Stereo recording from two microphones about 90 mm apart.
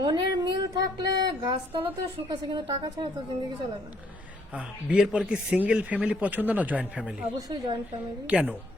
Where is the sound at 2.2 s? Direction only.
55° right (ahead or behind).